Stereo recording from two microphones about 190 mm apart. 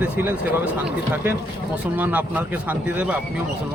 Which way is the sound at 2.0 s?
10° right (ahead or behind).